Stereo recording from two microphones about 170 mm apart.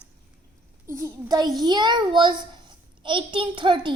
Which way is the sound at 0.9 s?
15° right (ahead or behind).